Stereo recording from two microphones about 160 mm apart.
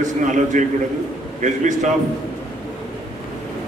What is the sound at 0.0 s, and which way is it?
Speech, 50° right (ahead or behind).